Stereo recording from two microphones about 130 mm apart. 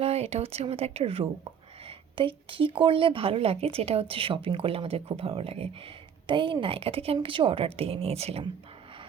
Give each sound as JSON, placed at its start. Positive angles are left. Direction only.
{"t": 0.0, "sound": "speech", "side_deg": -55}